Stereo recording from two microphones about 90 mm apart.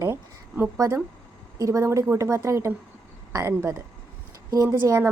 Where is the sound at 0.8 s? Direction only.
35° right (ahead or behind).